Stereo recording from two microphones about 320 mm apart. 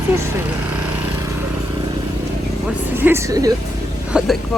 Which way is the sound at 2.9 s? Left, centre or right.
Centre.